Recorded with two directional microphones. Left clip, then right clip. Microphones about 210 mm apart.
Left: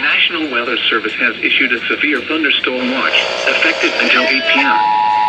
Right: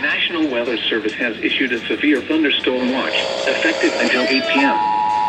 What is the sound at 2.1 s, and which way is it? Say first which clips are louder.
Speech: left 2 dB; 10° left (ahead or behind).